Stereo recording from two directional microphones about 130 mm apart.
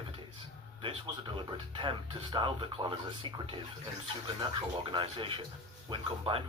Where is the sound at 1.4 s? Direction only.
40° right (ahead or behind).